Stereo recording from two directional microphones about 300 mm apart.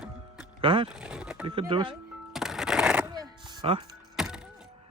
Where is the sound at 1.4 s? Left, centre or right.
Centre.